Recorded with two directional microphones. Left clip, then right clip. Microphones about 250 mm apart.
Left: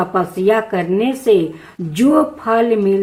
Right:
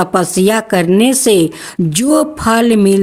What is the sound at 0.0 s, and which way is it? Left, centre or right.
Speech, right.